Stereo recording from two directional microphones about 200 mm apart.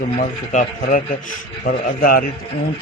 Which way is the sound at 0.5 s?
40° left (ahead or behind).